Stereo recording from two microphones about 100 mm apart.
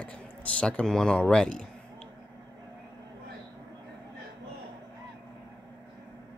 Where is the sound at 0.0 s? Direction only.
10° left (ahead or behind).